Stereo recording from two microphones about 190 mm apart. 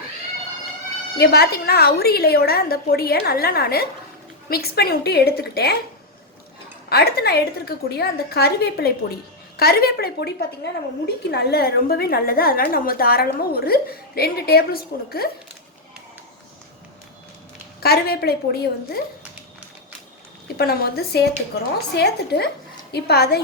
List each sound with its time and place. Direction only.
1.2 s a woman's voice: 55° left (ahead or behind)
6.9 s a woman's voice: 55° left (ahead or behind)
17.8 s a woman's voice: 55° left (ahead or behind)
20.6 s a woman's voice: 55° left (ahead or behind)